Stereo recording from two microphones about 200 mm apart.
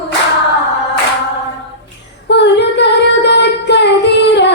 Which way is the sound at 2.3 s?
60° left (ahead or behind).